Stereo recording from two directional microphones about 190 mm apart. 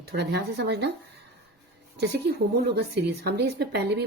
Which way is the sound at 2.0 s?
60° right (ahead or behind).